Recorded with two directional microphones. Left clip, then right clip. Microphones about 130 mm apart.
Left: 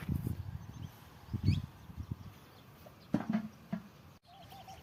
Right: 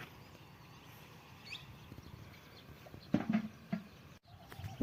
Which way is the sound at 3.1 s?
50° right (ahead or behind).